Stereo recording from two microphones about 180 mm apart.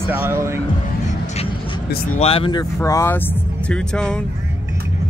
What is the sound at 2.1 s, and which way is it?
Speech, 30° left (ahead or behind).